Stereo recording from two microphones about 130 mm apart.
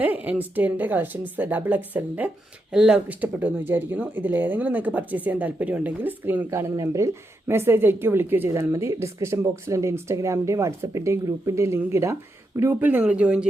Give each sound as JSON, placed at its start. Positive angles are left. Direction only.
{"t": 0.0, "sound": "speech", "side_deg": -10}